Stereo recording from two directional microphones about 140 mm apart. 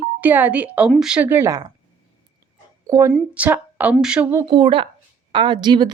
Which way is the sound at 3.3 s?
10° right (ahead or behind).